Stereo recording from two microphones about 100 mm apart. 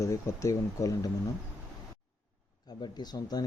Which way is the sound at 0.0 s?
30° left (ahead or behind).